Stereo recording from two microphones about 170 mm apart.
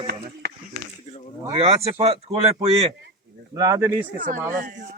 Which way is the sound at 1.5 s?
35° right (ahead or behind).